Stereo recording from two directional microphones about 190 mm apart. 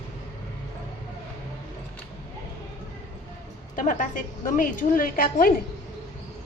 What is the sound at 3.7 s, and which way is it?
A woman's voice, 45° left (ahead or behind).